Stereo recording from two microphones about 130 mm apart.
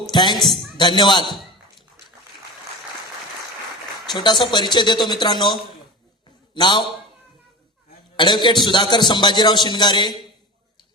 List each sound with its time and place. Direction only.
0.1 s speech: 35° left (ahead or behind)
4.1 s a man's voice: 35° left (ahead or behind)
8.1 s a man's voice: 35° left (ahead or behind)